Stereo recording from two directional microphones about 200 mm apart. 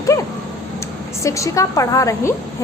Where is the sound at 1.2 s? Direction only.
15° left (ahead or behind).